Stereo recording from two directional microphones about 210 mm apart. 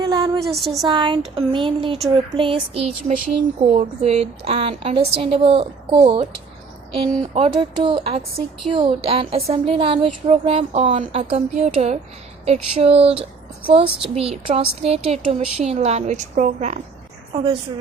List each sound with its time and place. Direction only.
0.0 s a sound: 20° right (ahead or behind)
0.4 s a woman's voice: centre (ahead or behind)
0.9 s a woman's voice: 20° right (ahead or behind)